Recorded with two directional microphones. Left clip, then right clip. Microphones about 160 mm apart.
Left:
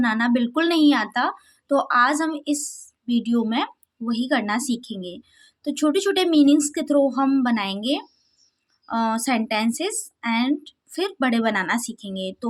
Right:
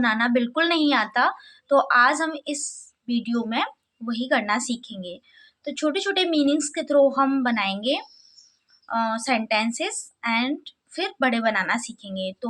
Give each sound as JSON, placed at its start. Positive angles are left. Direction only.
{"t": 0.0, "sound": "speech", "side_deg": 30}